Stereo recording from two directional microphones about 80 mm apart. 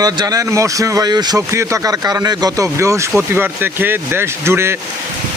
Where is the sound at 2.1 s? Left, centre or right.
Right.